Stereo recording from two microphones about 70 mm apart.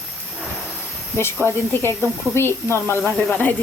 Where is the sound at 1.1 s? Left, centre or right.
Left.